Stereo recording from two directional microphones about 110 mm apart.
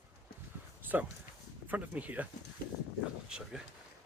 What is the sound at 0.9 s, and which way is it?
Speech, 15° right (ahead or behind).